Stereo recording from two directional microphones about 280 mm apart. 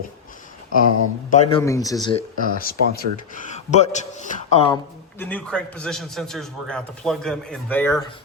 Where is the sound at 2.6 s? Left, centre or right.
Left.